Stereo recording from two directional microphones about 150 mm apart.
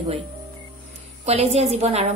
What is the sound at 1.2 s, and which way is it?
Speech, 45° right (ahead or behind).